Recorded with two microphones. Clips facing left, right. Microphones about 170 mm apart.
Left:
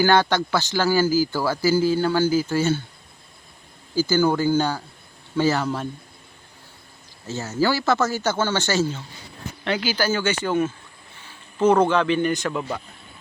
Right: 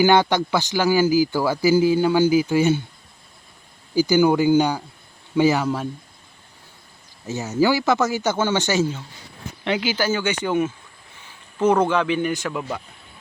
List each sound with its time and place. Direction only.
0.0 s speech: 15° right (ahead or behind)
3.9 s speech: 15° right (ahead or behind)
7.3 s speech: 15° right (ahead or behind)
11.9 s speech: 10° right (ahead or behind)